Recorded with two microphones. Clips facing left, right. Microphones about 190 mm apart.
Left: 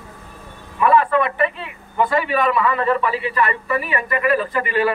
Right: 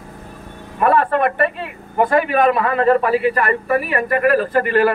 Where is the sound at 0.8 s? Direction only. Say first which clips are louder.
Right 1 dB; 50° right (ahead or behind).